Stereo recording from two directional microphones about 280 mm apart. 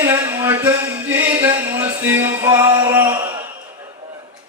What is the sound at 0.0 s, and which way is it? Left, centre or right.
Music, centre.